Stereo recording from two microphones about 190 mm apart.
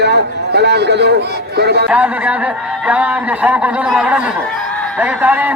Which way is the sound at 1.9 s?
5° right (ahead or behind).